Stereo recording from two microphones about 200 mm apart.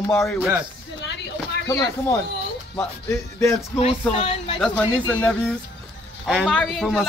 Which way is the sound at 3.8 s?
30° left (ahead or behind).